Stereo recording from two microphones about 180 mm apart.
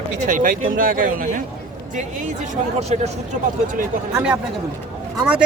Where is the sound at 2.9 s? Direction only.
40° right (ahead or behind).